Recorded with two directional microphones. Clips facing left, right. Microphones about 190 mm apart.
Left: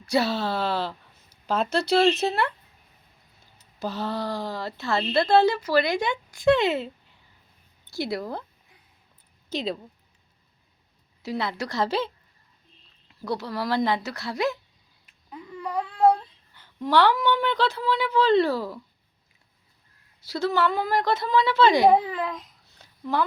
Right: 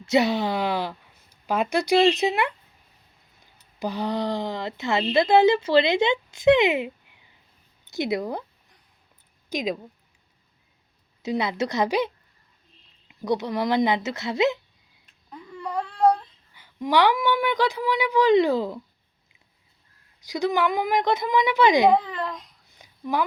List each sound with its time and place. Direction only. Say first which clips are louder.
0.0 s speech: right 3 dB; 20° right (ahead or behind)
3.8 s speech: right 3 dB; 15° right (ahead or behind)
9.5 s speech: right 2 dB; 10° right (ahead or behind)
11.2 s speech: right 4 dB; 20° right (ahead or behind)
15.0 s a sound: left 1 dB; 5° left (ahead or behind)
16.6 s speech: even; 10° right (ahead or behind)
20.2 s speech: right 1 dB; 15° right (ahead or behind)
21.9 s a child's voice: left 1 dB; 5° left (ahead or behind)
22.8 s a sound: even; 15° right (ahead or behind)